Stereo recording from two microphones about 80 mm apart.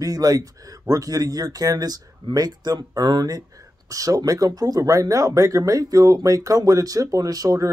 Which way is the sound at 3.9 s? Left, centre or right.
Right.